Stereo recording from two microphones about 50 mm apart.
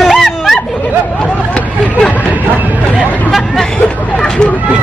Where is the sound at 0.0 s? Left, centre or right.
Centre.